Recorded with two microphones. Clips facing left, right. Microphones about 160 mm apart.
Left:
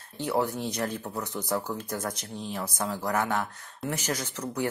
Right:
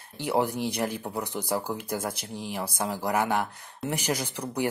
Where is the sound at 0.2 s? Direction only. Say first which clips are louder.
Right 2 dB; 15° right (ahead or behind).